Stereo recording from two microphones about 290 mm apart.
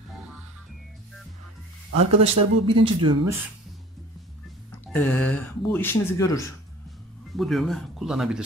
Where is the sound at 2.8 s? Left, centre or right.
Centre.